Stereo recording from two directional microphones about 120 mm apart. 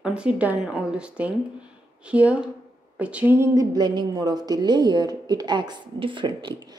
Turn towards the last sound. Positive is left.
turn(degrees=-40)  # may be behind; listen again after turning